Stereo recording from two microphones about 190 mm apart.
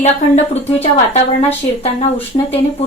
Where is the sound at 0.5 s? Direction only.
35° left (ahead or behind).